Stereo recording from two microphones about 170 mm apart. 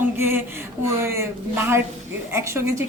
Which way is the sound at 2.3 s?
15° right (ahead or behind).